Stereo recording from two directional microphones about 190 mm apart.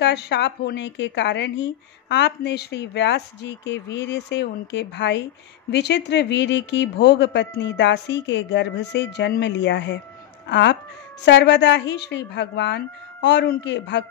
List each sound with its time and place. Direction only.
0.0 s a woman's voice: 65° left (ahead or behind)